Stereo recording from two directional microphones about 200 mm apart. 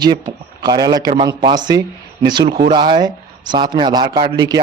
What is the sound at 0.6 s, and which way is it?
A man's voice, 20° right (ahead or behind).